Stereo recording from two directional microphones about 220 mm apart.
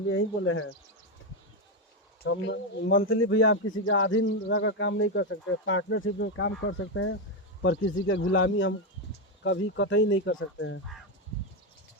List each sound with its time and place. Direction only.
0.1 s speech: 65° left (ahead or behind)
2.2 s speech: 60° left (ahead or behind)